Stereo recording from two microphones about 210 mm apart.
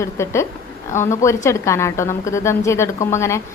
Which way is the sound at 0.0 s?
15° left (ahead or behind).